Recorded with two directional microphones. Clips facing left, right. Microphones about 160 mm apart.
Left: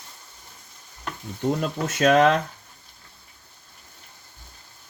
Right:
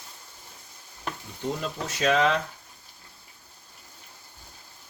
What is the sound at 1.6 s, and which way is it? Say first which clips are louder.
Speech: left 6 dB; 50° left (ahead or behind).